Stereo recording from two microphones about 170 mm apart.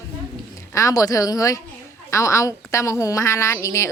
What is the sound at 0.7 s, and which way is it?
A woman's voice, 20° left (ahead or behind).